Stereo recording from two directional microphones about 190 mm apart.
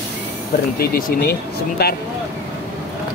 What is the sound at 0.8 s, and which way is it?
Speech, 50° left (ahead or behind).